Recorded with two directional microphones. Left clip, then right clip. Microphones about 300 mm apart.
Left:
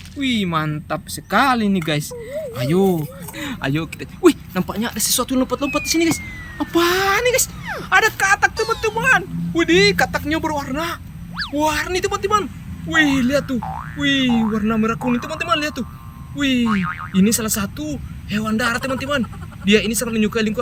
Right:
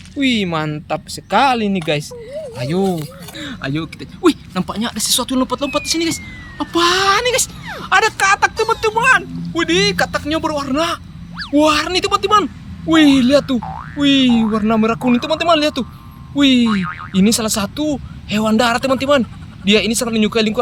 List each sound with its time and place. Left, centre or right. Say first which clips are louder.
0.2 s speech: right 3 dB; centre